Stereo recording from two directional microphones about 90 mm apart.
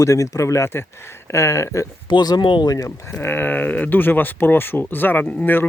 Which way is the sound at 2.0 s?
55° left (ahead or behind).